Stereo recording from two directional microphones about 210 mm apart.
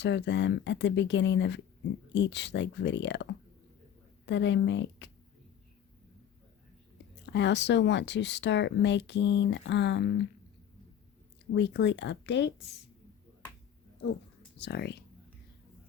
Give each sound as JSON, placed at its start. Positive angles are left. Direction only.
{"t": 0.0, "sound": "speech", "side_deg": 55}
{"t": 4.3, "sound": "speech", "side_deg": 60}
{"t": 7.3, "sound": "speech", "side_deg": 55}
{"t": 11.5, "sound": "speech", "side_deg": 55}
{"t": 14.6, "sound": "speech", "side_deg": 55}